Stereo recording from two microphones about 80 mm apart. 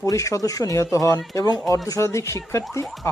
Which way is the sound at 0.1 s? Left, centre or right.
Left.